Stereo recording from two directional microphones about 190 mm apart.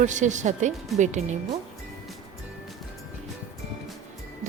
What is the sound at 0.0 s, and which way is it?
Speech, 40° right (ahead or behind).